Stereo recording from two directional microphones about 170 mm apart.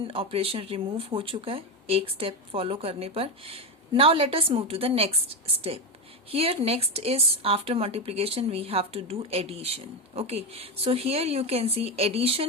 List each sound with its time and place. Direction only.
0.0 s speech: 30° right (ahead or behind)